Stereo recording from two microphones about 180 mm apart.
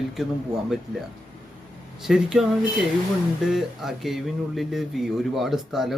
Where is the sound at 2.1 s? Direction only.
Centre (ahead or behind).